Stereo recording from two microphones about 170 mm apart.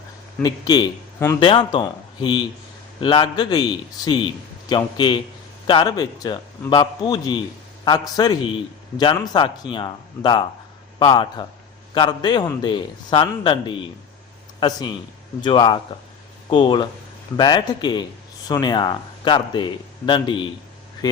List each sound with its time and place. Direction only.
0.4 s speech: 25° left (ahead or behind)